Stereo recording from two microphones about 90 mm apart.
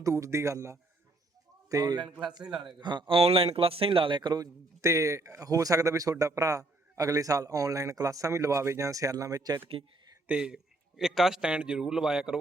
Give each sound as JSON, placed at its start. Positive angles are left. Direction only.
{"t": 0.0, "sound": "speech", "side_deg": -35}
{"t": 1.7, "sound": "a man's voice", "side_deg": -45}
{"t": 2.4, "sound": "a man's voice", "side_deg": -5}
{"t": 2.8, "sound": "a man's voice", "side_deg": -60}
{"t": 4.8, "sound": "speech", "side_deg": -35}
{"t": 10.2, "sound": "a man's voice", "side_deg": -10}